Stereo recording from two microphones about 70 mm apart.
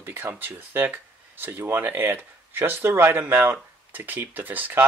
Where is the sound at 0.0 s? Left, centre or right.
Right.